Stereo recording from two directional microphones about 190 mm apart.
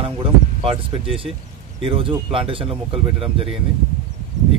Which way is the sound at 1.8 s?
30° right (ahead or behind).